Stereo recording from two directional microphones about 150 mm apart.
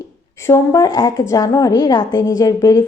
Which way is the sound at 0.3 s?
20° left (ahead or behind).